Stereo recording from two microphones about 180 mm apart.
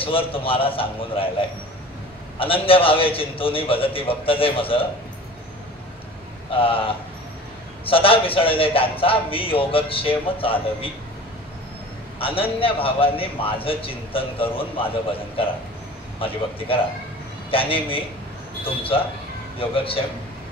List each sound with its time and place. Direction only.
0.0 s a man's voice: 30° left (ahead or behind)
2.3 s a man's voice: 30° left (ahead or behind)
6.5 s a man's voice: 30° left (ahead or behind)
12.2 s a man's voice: 30° left (ahead or behind)
16.2 s a man's voice: 30° left (ahead or behind)